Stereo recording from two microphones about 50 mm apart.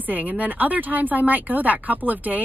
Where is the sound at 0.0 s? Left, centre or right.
Right.